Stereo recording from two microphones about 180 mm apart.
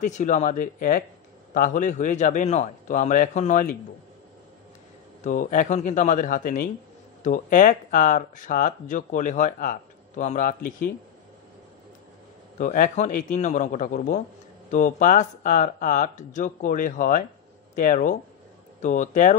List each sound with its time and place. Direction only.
0.0 s speech: 45° left (ahead or behind)
5.2 s speech: 45° left (ahead or behind)
12.5 s speech: 45° left (ahead or behind)